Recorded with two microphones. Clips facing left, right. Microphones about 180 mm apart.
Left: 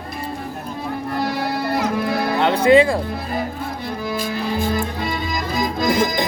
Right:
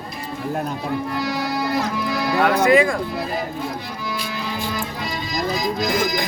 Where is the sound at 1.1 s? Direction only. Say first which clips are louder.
Left 1 dB; 55° left (ahead or behind).